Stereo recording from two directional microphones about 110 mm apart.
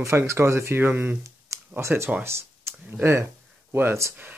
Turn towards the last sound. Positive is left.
turn(degrees=-20)  # may be behind; listen again after turning